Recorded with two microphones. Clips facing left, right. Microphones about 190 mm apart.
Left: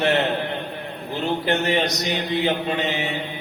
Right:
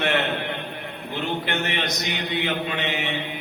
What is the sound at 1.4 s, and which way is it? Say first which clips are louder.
Mantra: left 6 dB; 35° left (ahead or behind).